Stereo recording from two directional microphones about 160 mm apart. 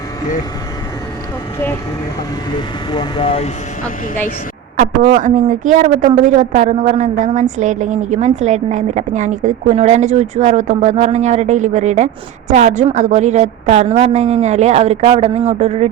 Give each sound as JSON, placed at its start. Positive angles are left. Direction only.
{"t": 2.6, "sound": "speech", "side_deg": 30}
{"t": 4.8, "sound": "a woman's voice", "side_deg": -60}